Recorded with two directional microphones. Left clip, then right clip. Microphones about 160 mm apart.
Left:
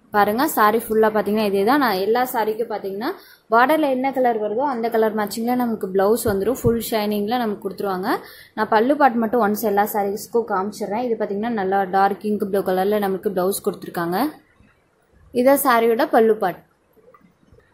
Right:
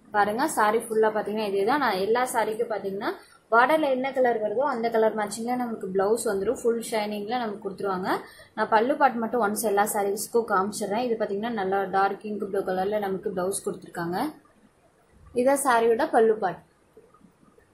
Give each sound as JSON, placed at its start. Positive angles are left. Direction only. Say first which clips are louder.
{"t": 0.1, "sound": "a woman's voice", "louder": "left 6 dB", "side_deg": 60}
{"t": 10.0, "sound": "a woman's voice", "louder": "left 3 dB", "side_deg": 35}
{"t": 15.3, "sound": "a woman's voice", "louder": "left 6 dB", "side_deg": 50}